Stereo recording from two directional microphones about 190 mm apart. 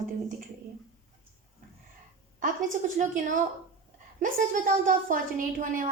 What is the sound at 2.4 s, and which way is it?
A woman's voice, 40° right (ahead or behind).